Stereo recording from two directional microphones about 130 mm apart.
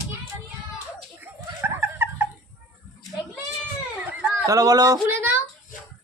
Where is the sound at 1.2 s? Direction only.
15° right (ahead or behind).